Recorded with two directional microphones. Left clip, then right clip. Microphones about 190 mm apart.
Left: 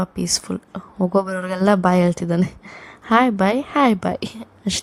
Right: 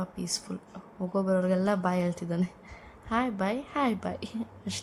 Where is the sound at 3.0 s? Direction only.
50° left (ahead or behind).